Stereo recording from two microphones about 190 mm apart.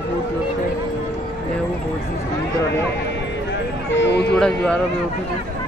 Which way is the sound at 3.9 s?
70° left (ahead or behind).